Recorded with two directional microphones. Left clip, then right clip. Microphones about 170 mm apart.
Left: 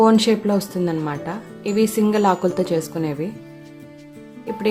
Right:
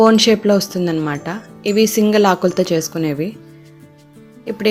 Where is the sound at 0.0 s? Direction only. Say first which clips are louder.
Right 4 dB; 10° right (ahead or behind).